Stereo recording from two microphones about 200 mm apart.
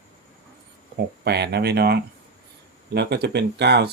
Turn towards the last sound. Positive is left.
turn(degrees=-55)  # may be behind; listen again after turning